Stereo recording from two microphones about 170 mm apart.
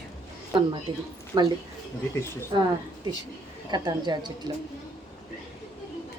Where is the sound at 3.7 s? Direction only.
25° right (ahead or behind).